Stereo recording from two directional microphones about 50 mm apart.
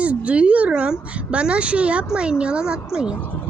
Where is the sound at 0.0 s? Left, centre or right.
Right.